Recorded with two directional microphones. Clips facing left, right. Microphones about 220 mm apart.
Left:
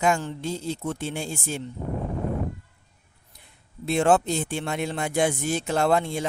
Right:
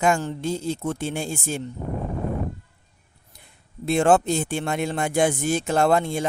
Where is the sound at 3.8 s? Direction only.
50° right (ahead or behind).